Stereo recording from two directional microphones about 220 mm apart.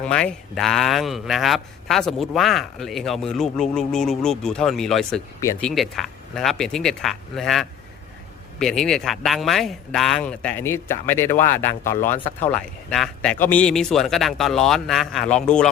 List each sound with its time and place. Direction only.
0.0 s a man's voice: 5° left (ahead or behind)
5.4 s speech: 15° left (ahead or behind)
5.6 s a man's voice: centre (ahead or behind)